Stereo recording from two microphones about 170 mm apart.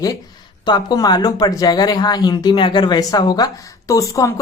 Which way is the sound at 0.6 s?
25° left (ahead or behind).